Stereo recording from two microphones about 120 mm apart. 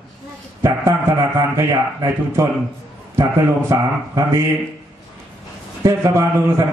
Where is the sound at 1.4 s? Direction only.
25° right (ahead or behind).